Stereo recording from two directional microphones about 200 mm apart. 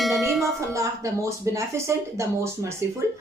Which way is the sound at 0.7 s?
15° right (ahead or behind).